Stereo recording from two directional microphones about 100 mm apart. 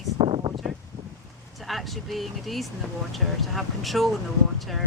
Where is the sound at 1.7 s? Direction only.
Centre (ahead or behind).